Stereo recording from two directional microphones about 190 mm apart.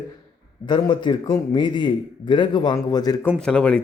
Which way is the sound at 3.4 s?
5° left (ahead or behind).